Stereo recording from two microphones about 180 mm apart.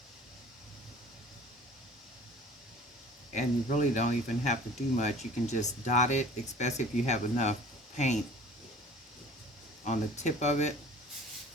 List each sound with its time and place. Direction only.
3.3 s speech: 40° left (ahead or behind)
9.8 s speech: 40° left (ahead or behind)